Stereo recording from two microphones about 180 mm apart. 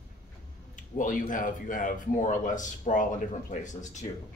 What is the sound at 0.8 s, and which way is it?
Speech, 45° left (ahead or behind).